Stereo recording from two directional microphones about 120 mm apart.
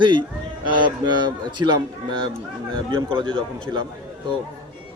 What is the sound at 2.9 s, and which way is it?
Speech, 45° right (ahead or behind).